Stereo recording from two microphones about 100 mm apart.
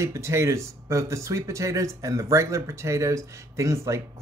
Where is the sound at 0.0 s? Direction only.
30° right (ahead or behind).